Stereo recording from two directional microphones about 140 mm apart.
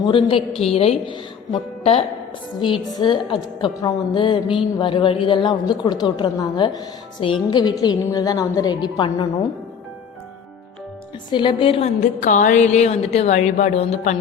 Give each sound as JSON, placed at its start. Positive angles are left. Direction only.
{"t": 0.0, "sound": "a woman's voice", "side_deg": 35}
{"t": 2.9, "sound": "a woman's voice", "side_deg": 30}
{"t": 11.3, "sound": "a woman's voice", "side_deg": 35}
{"t": 11.9, "sound": "a woman's voice", "side_deg": 65}